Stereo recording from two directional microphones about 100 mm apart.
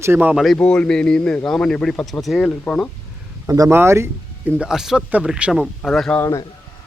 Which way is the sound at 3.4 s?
35° right (ahead or behind).